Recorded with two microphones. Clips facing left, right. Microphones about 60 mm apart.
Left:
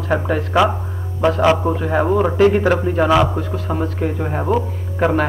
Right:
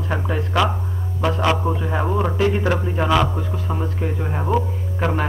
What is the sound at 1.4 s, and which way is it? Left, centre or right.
Speech, centre.